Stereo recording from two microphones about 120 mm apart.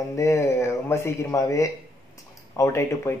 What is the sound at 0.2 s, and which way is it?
A man's voice, 25° left (ahead or behind).